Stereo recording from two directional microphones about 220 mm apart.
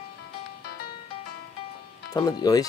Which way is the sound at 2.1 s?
15° left (ahead or behind).